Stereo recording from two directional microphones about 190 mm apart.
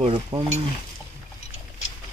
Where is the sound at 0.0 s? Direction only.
25° right (ahead or behind).